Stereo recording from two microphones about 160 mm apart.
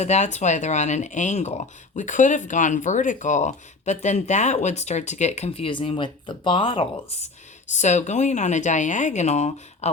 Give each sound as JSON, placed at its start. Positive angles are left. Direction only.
{"t": 0.0, "sound": "speech", "side_deg": 45}
{"t": 7.7, "sound": "speech", "side_deg": 45}